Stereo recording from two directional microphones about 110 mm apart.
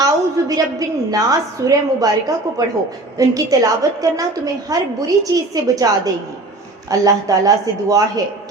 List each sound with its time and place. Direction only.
0.0 s a woman's voice: 35° right (ahead or behind)
7.0 s a woman's voice: 30° right (ahead or behind)